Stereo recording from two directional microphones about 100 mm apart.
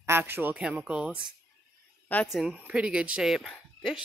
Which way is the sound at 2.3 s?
5° right (ahead or behind).